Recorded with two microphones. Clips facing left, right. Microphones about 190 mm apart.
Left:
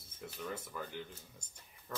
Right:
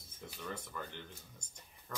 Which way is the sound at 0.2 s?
5° left (ahead or behind).